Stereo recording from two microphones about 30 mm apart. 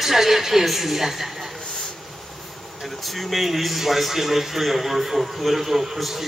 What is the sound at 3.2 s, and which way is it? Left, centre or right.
A man's voice, centre.